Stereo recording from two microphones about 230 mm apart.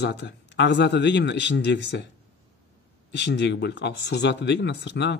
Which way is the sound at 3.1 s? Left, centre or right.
Left.